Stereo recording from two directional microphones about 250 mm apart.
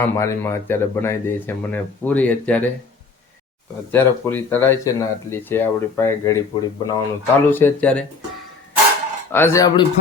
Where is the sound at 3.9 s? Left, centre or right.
Centre.